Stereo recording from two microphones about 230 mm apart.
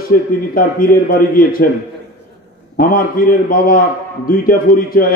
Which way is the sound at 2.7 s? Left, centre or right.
Left.